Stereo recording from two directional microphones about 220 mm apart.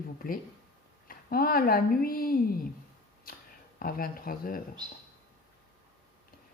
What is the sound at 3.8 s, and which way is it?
Speech, 40° left (ahead or behind).